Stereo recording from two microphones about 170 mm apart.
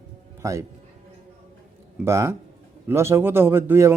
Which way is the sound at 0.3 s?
20° right (ahead or behind).